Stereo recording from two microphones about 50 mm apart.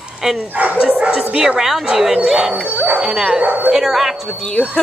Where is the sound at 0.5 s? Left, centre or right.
Right.